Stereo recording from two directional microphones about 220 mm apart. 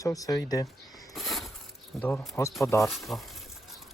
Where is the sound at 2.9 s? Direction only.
Centre (ahead or behind).